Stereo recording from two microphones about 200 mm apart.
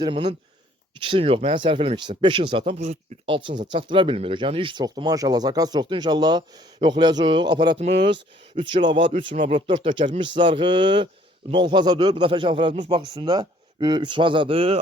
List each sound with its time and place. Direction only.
0.0 s speech: 25° right (ahead or behind)
9.1 s speech: 35° right (ahead or behind)
9.6 s speech: 25° right (ahead or behind)